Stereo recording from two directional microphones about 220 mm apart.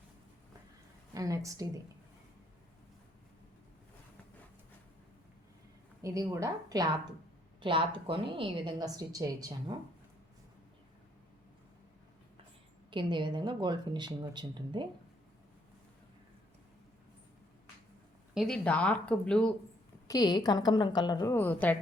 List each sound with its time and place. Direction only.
1.1 s a woman's voice: 15° right (ahead or behind)
6.0 s a woman's voice: 15° right (ahead or behind)
12.9 s a woman's voice: 20° right (ahead or behind)
18.3 s speech: 5° left (ahead or behind)
20.1 s a woman's voice: 20° left (ahead or behind)